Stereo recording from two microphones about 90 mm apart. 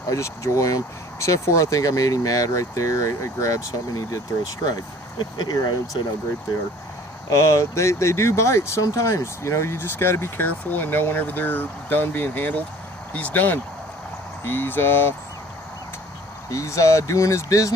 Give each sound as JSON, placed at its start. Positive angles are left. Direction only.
{"t": 0.1, "sound": "speech", "side_deg": 35}
{"t": 5.4, "sound": "speech", "side_deg": 50}
{"t": 7.3, "sound": "speech", "side_deg": 35}
{"t": 16.5, "sound": "speech", "side_deg": 35}